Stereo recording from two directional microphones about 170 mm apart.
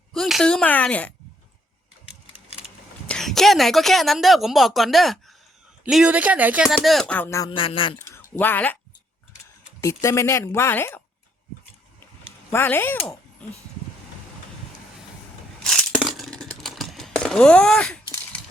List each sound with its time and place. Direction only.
0.1 s a woman's voice: centre (ahead or behind)
3.1 s a woman's voice: centre (ahead or behind)
7.5 s speech: 30° left (ahead or behind)
7.9 s speech: 15° left (ahead or behind)
9.8 s a woman's voice: 15° left (ahead or behind)
12.5 s a woman's voice: 10° left (ahead or behind)
15.6 s a sound: centre (ahead or behind)